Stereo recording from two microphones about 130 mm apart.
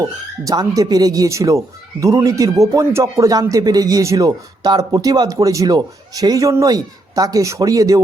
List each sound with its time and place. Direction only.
0.0 s speech: 25° right (ahead or behind)